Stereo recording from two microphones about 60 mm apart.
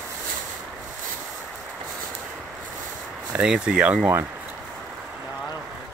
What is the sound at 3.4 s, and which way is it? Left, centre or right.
Speech, centre.